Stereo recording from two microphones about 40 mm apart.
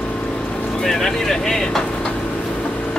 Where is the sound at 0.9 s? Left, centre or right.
Centre.